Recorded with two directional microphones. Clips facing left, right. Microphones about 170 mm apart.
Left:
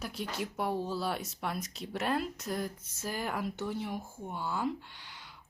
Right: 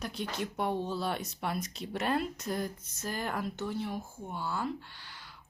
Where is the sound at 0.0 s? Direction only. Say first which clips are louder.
Right 1 dB; 5° left (ahead or behind).